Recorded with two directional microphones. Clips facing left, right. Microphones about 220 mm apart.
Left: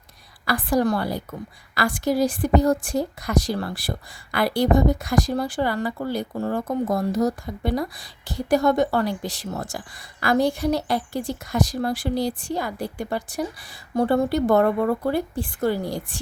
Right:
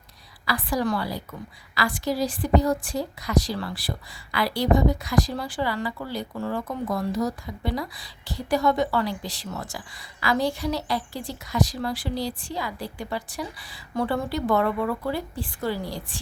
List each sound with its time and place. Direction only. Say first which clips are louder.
0.4 s a woman's voice: left 5 dB; 50° left (ahead or behind)